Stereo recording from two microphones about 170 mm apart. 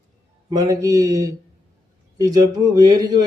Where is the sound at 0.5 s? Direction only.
20° right (ahead or behind).